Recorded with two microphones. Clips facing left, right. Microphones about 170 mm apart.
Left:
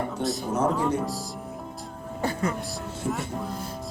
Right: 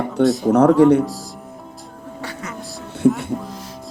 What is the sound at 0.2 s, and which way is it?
Speech, 70° right (ahead or behind).